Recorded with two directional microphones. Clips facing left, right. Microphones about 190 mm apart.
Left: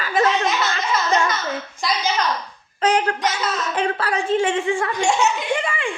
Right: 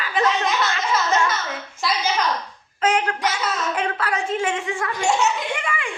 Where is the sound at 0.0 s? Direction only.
45° left (ahead or behind).